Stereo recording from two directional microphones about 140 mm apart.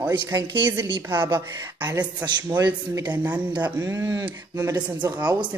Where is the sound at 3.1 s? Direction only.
10° right (ahead or behind).